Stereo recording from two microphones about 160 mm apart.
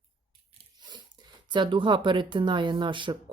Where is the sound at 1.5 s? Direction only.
30° right (ahead or behind).